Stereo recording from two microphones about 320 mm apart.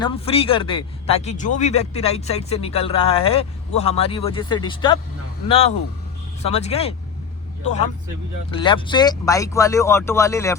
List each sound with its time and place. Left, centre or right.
0.0 s speech: centre